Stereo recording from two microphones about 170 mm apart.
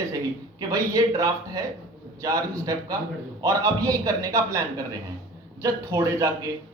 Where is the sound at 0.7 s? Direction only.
20° right (ahead or behind).